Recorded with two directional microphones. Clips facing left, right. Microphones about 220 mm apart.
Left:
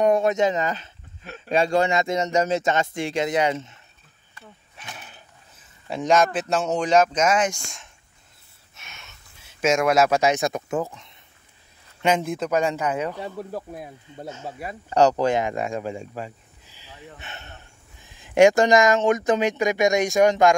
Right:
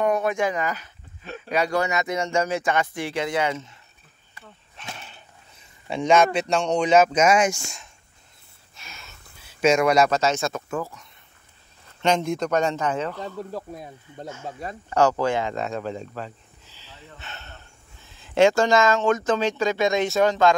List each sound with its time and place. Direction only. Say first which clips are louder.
0.0 s speech: left 3 dB; 25° left (ahead or behind)
4.7 s speech: right 2 dB; 5° left (ahead or behind)
12.0 s a man's voice: even; 5° left (ahead or behind)
14.2 s speech: even; 20° left (ahead or behind)